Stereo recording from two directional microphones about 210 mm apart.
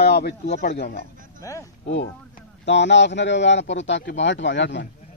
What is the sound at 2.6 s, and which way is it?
A man's voice, 55° left (ahead or behind).